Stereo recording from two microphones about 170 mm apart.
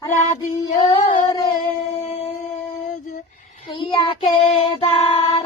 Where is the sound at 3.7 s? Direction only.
30° left (ahead or behind).